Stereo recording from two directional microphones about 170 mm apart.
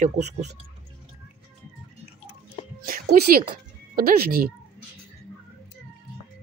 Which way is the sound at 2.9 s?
60° right (ahead or behind).